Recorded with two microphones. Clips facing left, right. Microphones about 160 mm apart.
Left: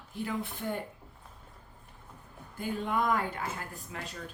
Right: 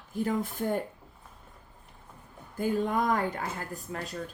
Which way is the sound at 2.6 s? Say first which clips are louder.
Right 4 dB; 45° right (ahead or behind).